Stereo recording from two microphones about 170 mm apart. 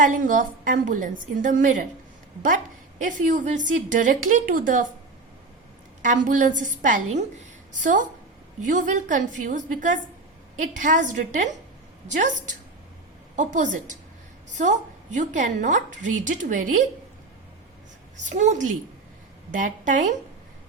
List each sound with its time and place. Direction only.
0.0 s a woman's voice: 50° right (ahead or behind)
3.0 s a woman's voice: 50° right (ahead or behind)
6.1 s a woman's voice: 50° right (ahead or behind)
18.3 s a woman's voice: 45° right (ahead or behind)